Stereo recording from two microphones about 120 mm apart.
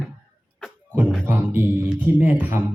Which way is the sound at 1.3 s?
15° right (ahead or behind).